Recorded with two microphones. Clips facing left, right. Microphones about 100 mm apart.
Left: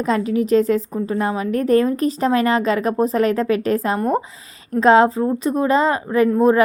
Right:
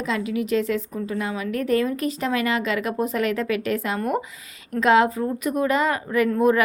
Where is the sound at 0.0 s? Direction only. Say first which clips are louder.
Left 6 dB; 40° left (ahead or behind).